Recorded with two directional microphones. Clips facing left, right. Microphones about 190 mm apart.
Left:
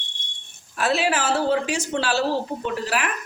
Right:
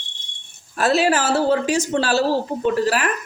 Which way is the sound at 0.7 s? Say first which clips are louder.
Right 4 dB; 40° right (ahead or behind).